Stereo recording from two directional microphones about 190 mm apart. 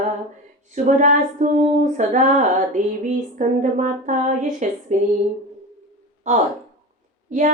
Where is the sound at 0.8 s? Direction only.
40° right (ahead or behind).